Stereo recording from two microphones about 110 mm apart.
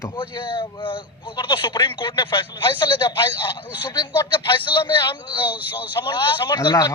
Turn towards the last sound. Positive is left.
turn(degrees=35)  # may be behind; listen again after turning